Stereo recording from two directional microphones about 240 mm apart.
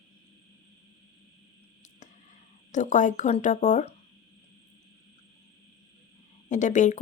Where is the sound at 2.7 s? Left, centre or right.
Left.